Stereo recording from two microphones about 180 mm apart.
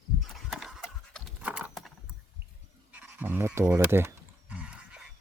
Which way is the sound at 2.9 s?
10° right (ahead or behind).